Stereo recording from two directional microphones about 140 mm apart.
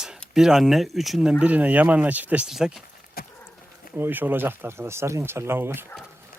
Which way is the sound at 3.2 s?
90° left.